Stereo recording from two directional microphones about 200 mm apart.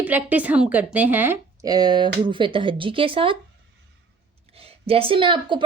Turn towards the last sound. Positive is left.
turn(degrees=-25)  # may be behind; listen again after turning